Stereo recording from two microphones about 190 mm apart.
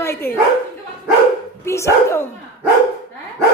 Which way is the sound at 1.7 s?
15° left (ahead or behind).